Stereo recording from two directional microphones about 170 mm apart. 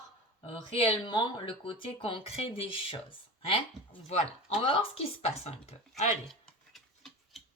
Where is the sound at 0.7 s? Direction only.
30° left (ahead or behind).